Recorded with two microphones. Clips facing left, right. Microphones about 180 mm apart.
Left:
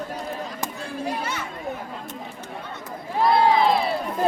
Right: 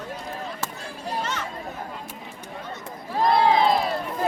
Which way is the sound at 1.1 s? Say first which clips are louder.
Right 1 dB; 10° left (ahead or behind).